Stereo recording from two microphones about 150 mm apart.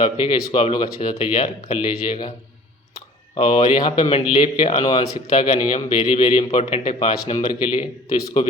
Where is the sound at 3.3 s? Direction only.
35° left (ahead or behind).